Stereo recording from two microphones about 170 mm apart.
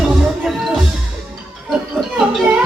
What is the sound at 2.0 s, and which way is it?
Music, 5° left (ahead or behind).